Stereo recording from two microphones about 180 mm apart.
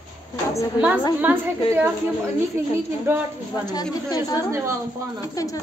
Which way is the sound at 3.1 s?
15° right (ahead or behind).